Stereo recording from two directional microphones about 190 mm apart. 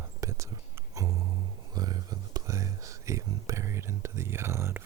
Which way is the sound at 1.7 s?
20° right (ahead or behind).